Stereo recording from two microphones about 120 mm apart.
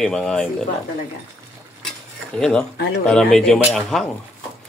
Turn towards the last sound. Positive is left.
turn(degrees=0)  # may be behind; listen again after turning